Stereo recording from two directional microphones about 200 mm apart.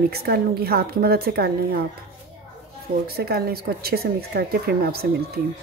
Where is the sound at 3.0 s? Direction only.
50° right (ahead or behind).